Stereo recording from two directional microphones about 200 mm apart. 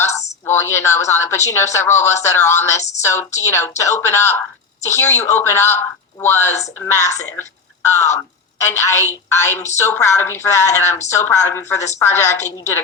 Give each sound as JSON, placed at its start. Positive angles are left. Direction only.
{"t": 0.1, "sound": "a woman's voice", "side_deg": 15}